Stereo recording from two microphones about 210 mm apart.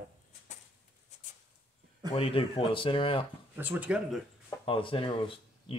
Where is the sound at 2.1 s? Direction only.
25° left (ahead or behind).